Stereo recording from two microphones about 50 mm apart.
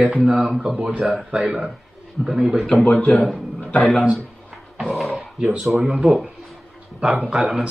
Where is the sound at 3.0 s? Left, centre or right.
Left.